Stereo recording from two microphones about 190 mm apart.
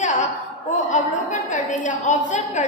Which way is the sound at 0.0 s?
40° left (ahead or behind).